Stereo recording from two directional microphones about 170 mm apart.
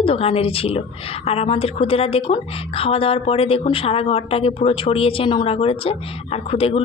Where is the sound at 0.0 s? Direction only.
35° left (ahead or behind).